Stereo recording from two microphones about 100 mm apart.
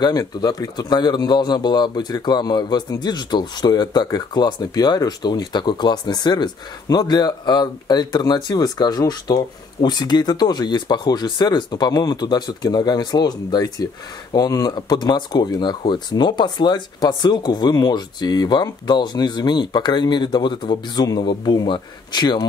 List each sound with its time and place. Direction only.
0.0 s speech: 40° left (ahead or behind)